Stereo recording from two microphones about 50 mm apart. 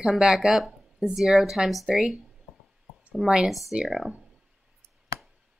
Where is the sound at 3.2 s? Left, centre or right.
Centre.